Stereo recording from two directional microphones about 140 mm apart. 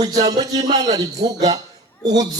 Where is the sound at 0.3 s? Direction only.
25° right (ahead or behind).